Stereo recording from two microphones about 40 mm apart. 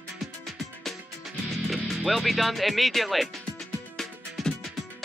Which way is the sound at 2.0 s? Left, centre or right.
Centre.